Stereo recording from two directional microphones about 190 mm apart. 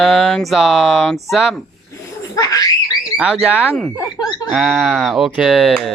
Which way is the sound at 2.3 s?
20° left (ahead or behind).